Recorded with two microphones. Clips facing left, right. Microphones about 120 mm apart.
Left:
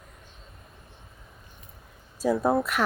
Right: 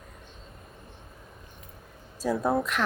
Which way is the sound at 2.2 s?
10° left (ahead or behind).